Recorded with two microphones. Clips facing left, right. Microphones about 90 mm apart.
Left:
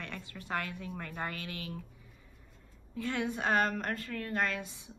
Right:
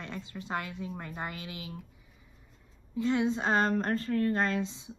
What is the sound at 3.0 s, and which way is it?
A woman's voice, 20° right (ahead or behind).